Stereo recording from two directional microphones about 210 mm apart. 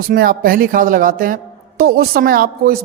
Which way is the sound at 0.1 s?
45° right (ahead or behind).